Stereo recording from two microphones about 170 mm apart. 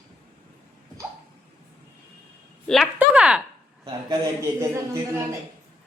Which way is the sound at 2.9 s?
5° right (ahead or behind).